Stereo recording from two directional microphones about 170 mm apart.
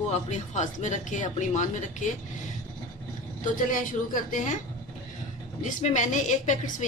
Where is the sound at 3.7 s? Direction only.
50° left (ahead or behind).